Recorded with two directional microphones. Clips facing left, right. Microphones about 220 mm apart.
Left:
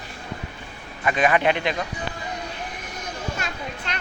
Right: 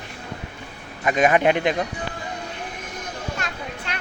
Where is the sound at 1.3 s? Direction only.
15° right (ahead or behind).